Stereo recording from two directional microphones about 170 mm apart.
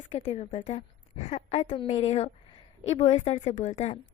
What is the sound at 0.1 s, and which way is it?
A woman's voice, 40° left (ahead or behind).